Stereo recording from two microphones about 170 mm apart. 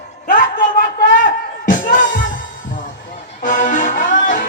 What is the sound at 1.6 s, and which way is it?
Music, 50° left (ahead or behind).